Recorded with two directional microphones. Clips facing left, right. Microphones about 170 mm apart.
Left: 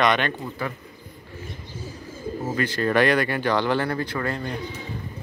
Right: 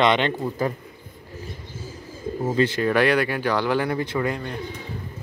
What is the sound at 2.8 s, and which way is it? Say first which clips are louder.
Speech: left 3 dB; 10° right (ahead or behind).